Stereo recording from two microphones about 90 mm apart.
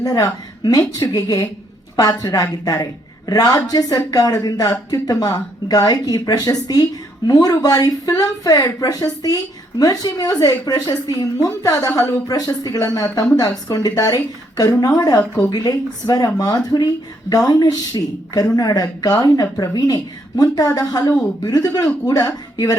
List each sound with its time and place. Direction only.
0.0 s a woman's voice: 40° left (ahead or behind)